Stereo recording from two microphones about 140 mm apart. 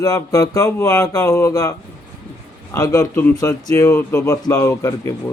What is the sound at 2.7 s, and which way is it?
A man's voice, 25° left (ahead or behind).